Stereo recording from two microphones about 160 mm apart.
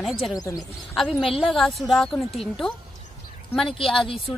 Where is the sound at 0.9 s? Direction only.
5° left (ahead or behind).